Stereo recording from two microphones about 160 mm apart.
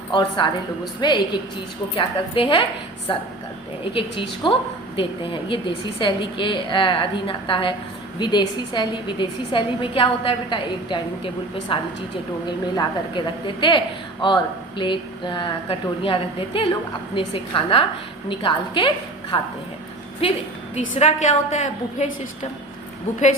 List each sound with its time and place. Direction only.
0.1 s a woman's voice: 30° left (ahead or behind)
20.7 s a woman's voice: 45° left (ahead or behind)